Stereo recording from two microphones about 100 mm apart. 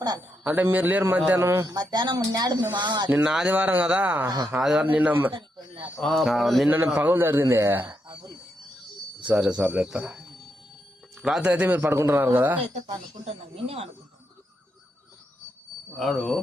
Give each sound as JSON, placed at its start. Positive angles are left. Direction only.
{"t": 0.4, "sound": "a man's voice", "side_deg": -15}
{"t": 1.6, "sound": "speech", "side_deg": -45}
{"t": 3.2, "sound": "a man's voice", "side_deg": -5}
{"t": 4.3, "sound": "speech", "side_deg": -45}
{"t": 4.6, "sound": "speech", "side_deg": -5}
{"t": 4.9, "sound": "a man's voice", "side_deg": -15}
{"t": 5.3, "sound": "speech", "side_deg": -60}
{"t": 6.0, "sound": "speech", "side_deg": 5}
{"t": 6.7, "sound": "a man's voice", "side_deg": -20}
{"t": 9.4, "sound": "a man's voice", "side_deg": -10}
{"t": 13.2, "sound": "speech", "side_deg": -90}
{"t": 16.0, "sound": "speech", "side_deg": 0}